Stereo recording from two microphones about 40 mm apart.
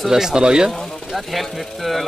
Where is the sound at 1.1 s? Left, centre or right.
Centre.